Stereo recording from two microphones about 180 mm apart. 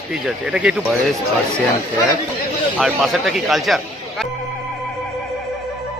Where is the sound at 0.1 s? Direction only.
5° right (ahead or behind).